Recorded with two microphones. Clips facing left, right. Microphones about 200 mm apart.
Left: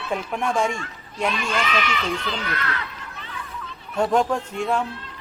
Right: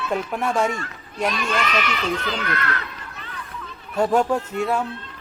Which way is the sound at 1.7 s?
45° right (ahead or behind).